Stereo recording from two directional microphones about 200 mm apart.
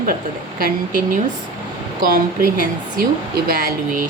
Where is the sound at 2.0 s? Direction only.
45° right (ahead or behind).